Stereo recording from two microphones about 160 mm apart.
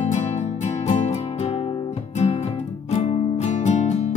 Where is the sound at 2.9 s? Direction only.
40° left (ahead or behind).